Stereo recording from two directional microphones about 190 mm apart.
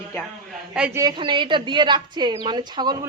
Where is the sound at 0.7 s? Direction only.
5° right (ahead or behind).